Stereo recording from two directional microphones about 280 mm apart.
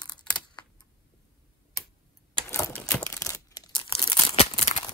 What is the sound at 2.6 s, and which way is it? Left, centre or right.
Crumpling, centre.